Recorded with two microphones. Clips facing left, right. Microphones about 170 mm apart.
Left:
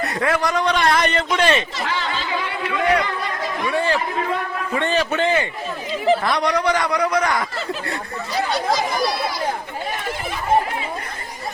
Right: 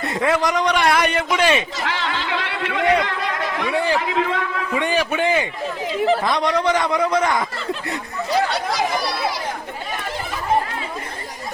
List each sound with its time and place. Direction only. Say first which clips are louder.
0.0 s a man's voice: right 1 dB; 25° right (ahead or behind)
1.9 s a sound: even; 75° right (ahead or behind)
3.7 s a man's voice: even; 15° right (ahead or behind)
4.0 s a man's voice: right 3 dB; 90° right
4.7 s a man's voice: left 1 dB; 10° right (ahead or behind)